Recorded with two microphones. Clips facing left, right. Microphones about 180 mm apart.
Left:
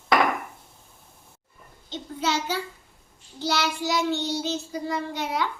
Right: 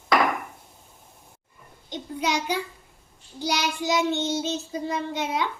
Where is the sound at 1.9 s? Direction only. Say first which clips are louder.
Even; 15° right (ahead or behind).